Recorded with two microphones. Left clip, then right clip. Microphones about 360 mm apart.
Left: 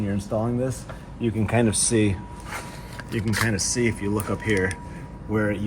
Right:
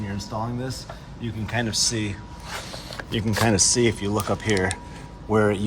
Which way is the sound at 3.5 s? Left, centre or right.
Centre.